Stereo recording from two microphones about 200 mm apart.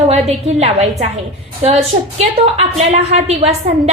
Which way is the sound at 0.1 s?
30° right (ahead or behind).